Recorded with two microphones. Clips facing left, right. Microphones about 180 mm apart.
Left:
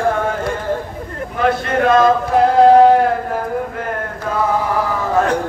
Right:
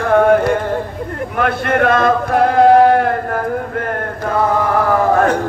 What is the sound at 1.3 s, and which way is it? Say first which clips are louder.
Speech: even; 60° right (ahead or behind).